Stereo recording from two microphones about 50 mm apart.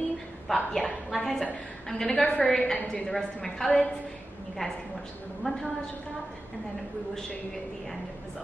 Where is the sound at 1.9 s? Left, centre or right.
Centre.